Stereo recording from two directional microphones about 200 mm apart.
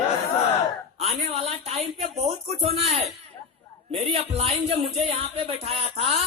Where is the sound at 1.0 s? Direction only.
30° right (ahead or behind).